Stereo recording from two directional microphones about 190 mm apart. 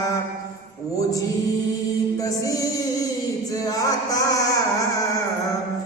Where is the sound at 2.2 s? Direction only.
20° left (ahead or behind).